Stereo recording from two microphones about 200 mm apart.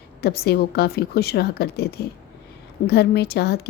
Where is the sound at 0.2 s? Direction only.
50° left (ahead or behind).